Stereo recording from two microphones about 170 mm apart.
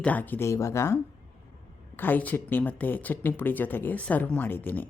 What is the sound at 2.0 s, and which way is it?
Speech, 10° left (ahead or behind).